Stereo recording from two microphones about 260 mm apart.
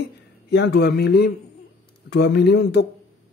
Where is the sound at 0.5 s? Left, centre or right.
Left.